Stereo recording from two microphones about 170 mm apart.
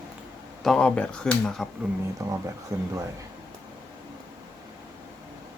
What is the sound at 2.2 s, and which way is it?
Speech, 20° right (ahead or behind).